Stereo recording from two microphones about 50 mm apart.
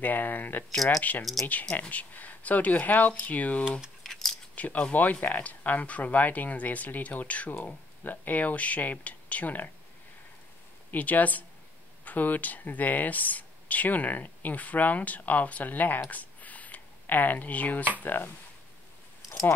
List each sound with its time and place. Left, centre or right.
0.0 s speech: left
4.0 s keys jangling: centre
4.6 s speech: left
10.9 s speech: left
16.1 s a sound: left
18.0 s speech: left